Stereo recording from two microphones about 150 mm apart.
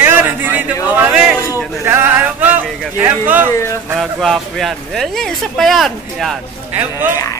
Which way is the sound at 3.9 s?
Centre (ahead or behind).